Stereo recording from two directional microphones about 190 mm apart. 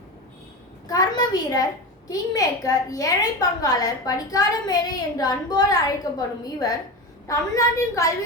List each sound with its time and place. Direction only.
0.9 s a woman's voice: 20° left (ahead or behind)